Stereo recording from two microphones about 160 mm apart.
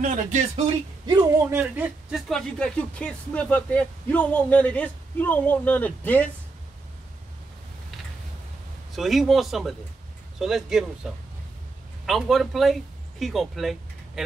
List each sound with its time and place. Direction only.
0.0 s speech: 50° right (ahead or behind)
1.0 s a man's voice: 25° right (ahead or behind)
1.5 s speech: 10° right (ahead or behind); by 6.3 s 10° left (ahead or behind)
8.9 s speech: centre (ahead or behind)
12.1 s speech: centre (ahead or behind)